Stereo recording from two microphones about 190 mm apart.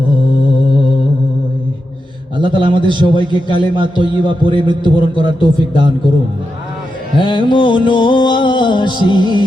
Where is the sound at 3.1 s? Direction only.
25° left (ahead or behind).